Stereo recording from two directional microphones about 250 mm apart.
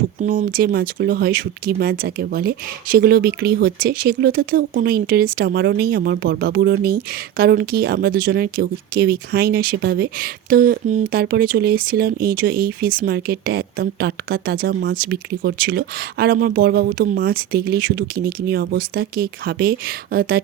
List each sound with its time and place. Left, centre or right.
0.2 s speech: right